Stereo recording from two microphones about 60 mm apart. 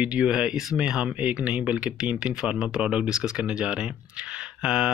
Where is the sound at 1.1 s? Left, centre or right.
Right.